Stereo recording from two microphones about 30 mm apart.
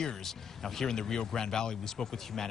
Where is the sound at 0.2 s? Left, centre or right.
Centre.